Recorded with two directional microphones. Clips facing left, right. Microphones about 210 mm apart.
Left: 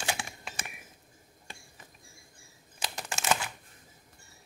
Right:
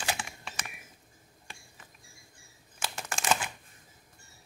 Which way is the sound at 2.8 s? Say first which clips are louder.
Even; 15° left (ahead or behind).